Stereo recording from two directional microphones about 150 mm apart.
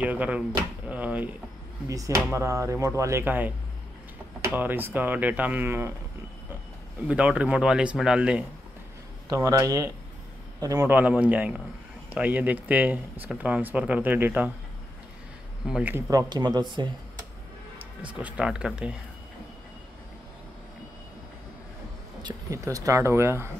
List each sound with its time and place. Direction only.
0.0 s a man's voice: 10° right (ahead or behind)
0.8 s drawer open or close: 10° right (ahead or behind)
1.9 s a man's voice: 20° right (ahead or behind)
7.1 s a man's voice: 10° right (ahead or behind)
9.3 s a man's voice: 20° right (ahead or behind)
15.6 s speech: 5° right (ahead or behind)
15.9 s speech: 25° right (ahead or behind)
18.0 s a man's voice: 10° right (ahead or behind)
22.2 s speech: 20° right (ahead or behind)